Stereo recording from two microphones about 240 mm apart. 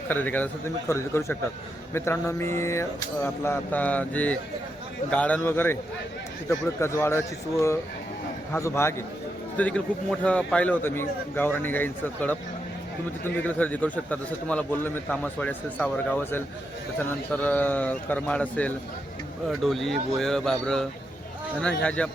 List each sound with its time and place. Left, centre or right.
0.1 s a man's voice: centre